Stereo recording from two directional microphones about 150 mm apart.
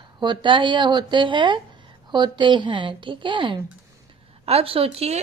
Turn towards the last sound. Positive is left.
turn(degrees=-40)  # may be behind; listen again after turning